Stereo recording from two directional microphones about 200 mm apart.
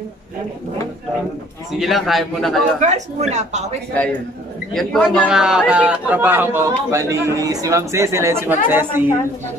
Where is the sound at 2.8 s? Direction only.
35° right (ahead or behind).